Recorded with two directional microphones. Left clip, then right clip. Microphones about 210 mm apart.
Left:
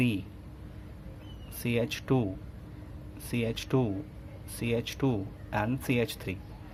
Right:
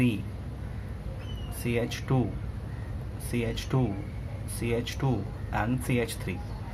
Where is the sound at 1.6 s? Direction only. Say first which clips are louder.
Even; 40° left (ahead or behind).